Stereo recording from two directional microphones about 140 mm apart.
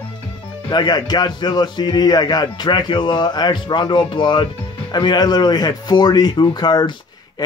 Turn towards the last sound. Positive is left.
turn(degrees=30)  # may be behind; listen again after turning